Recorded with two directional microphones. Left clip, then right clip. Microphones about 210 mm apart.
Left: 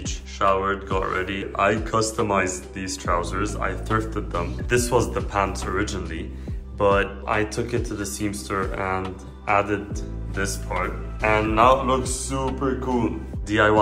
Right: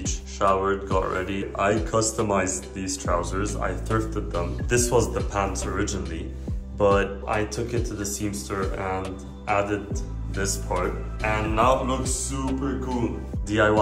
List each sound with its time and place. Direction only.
0.0 s a man's voice: 20° right (ahead or behind)
10.3 s a man's voice: 15° right (ahead or behind)
11.1 s a man's voice: 5° right (ahead or behind)